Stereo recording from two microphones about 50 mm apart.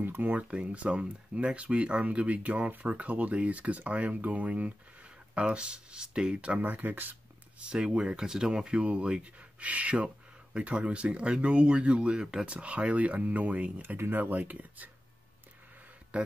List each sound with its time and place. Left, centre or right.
0.0 s speech: right
6.6 s speech: right
7.5 s speech: centre
13.7 s speech: right